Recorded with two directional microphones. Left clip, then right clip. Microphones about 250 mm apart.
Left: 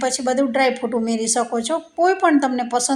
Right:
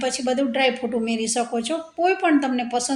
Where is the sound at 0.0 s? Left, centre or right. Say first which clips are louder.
Left 3 dB; centre.